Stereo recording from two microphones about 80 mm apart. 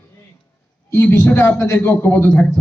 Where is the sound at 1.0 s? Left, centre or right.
Left.